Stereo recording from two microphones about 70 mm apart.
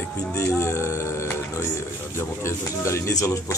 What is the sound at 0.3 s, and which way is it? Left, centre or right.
Music, left.